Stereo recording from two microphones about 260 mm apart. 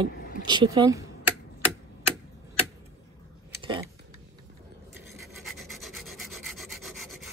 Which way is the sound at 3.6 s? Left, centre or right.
Centre.